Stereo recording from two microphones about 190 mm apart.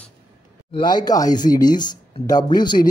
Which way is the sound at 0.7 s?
20° left (ahead or behind).